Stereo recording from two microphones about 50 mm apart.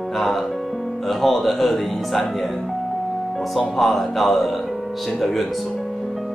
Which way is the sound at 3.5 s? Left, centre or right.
Centre.